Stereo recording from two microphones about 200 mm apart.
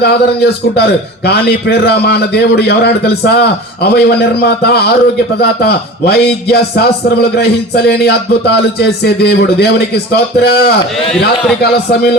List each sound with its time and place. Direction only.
0.0 s a man's voice: 55° left (ahead or behind)